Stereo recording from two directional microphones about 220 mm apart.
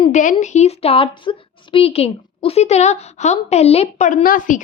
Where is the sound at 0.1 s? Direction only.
35° left (ahead or behind).